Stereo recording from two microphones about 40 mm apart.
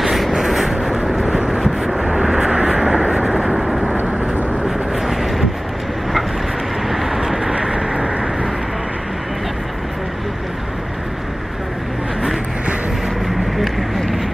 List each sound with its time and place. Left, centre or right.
0.0 s a sound: centre
0.5 s vehicle: centre
1.1 s vehicle: right
3.0 s vehicle: right
4.6 s vehicle: centre
6.9 s vehicle: centre